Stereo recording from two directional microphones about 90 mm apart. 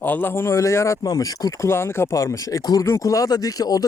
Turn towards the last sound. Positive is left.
turn(degrees=45)  # may be behind; listen again after turning